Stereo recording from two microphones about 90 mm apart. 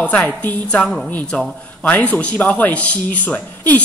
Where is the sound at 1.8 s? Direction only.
15° left (ahead or behind).